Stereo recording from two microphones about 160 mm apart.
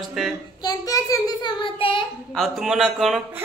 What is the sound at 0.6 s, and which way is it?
Child singing, 20° left (ahead or behind).